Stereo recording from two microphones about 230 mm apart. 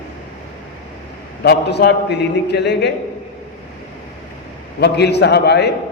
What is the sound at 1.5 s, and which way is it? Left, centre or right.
A man's voice, left.